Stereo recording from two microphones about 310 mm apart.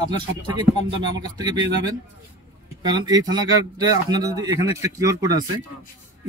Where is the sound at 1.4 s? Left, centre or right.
Centre.